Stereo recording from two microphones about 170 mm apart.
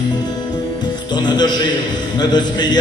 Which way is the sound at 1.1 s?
25° left (ahead or behind).